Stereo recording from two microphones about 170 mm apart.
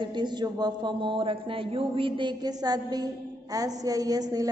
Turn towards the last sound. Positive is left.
turn(degrees=-20)  # may be behind; listen again after turning